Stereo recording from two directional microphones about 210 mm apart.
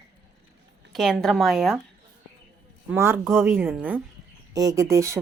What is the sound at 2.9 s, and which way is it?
Speech, 10° right (ahead or behind).